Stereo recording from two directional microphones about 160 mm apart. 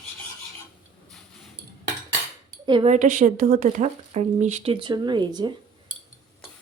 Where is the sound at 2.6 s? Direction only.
30° right (ahead or behind).